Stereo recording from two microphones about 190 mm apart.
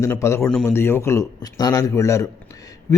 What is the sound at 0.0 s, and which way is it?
A man's voice, 15° left (ahead or behind).